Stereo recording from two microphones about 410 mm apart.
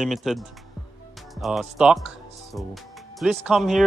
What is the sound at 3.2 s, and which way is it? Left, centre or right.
Speech, centre.